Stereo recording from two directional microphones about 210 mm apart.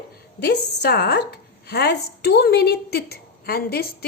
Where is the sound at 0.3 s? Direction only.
50° left (ahead or behind).